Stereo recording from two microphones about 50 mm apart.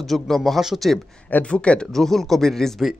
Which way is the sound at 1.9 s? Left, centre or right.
Centre.